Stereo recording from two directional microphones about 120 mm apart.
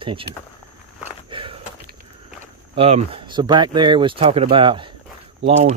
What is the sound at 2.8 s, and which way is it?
Speech, 60° right (ahead or behind).